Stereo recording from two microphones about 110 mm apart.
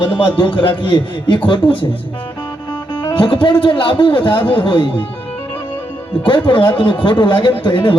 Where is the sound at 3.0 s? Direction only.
45° left (ahead or behind).